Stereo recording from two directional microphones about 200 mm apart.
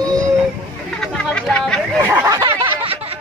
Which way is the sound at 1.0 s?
5° left (ahead or behind).